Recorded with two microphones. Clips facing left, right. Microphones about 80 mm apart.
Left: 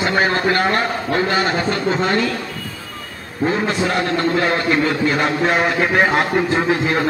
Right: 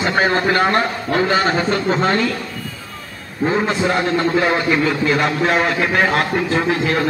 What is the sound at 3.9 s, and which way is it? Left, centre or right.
Speech, centre.